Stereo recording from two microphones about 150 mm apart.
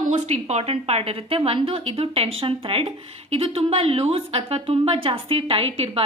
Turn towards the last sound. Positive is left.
turn(degrees=-40)  # may be behind; listen again after turning